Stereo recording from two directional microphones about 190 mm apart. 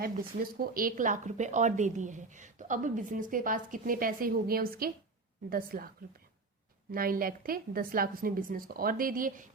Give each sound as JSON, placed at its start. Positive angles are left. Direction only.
{"t": 0.6, "sound": "a woman's voice", "side_deg": -50}
{"t": 6.9, "sound": "a woman's voice", "side_deg": -50}